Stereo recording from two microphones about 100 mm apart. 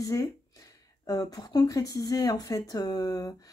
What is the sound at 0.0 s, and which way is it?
Speech, 35° left (ahead or behind).